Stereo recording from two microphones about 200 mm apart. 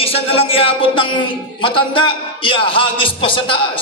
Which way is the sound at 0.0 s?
30° left (ahead or behind).